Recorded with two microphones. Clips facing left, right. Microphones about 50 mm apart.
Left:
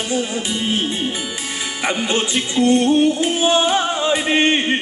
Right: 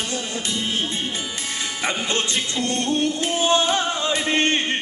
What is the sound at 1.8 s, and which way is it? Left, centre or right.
Music, centre.